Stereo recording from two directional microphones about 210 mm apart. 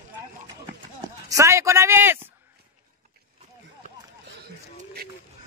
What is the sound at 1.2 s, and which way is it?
A man's voice, 15° right (ahead or behind).